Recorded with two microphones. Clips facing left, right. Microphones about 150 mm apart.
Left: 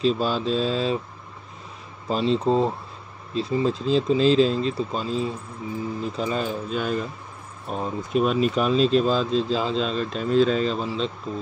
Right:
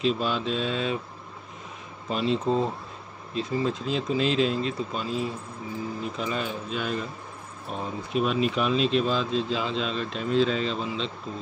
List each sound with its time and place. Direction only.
0.0 s speech: 35° left (ahead or behind)
2.0 s speech: 30° left (ahead or behind)